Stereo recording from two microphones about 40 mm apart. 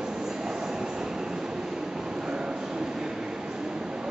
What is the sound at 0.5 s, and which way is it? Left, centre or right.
Train, centre.